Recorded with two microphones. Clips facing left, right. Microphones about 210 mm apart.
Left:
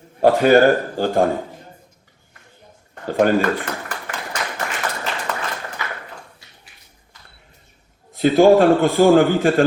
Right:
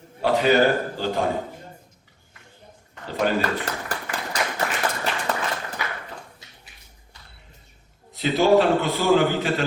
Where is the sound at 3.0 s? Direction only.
50° left (ahead or behind).